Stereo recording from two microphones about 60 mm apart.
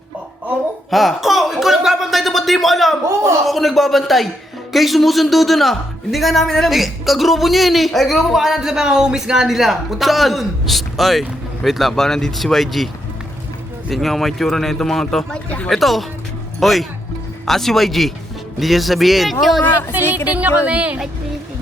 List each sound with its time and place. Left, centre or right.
0.9 s a sound: centre
3.4 s a man's voice: centre
13.9 s a man's voice: centre
15.4 s speech: left
15.7 s a man's voice: centre
19.9 s speech: right